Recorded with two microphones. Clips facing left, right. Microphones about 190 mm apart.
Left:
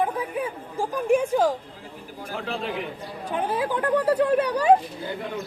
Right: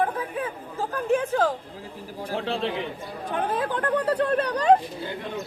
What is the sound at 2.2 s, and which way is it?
Speech, 30° right (ahead or behind).